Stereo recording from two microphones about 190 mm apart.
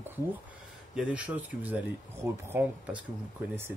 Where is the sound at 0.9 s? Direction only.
5° right (ahead or behind).